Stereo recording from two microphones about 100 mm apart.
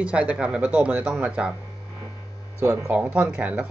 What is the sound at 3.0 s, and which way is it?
Speech, 15° right (ahead or behind).